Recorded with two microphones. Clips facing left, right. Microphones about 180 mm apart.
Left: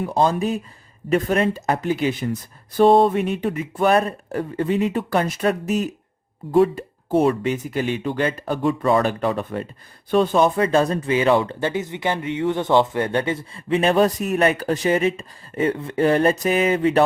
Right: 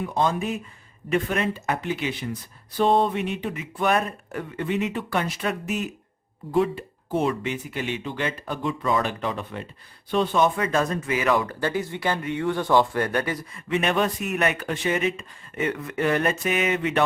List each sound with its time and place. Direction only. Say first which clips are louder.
0.0 s speech: left 5 dB; 35° left (ahead or behind); by 9.0 s 50° left (ahead or behind)
9.0 s speech: left 6 dB; 40° left (ahead or behind)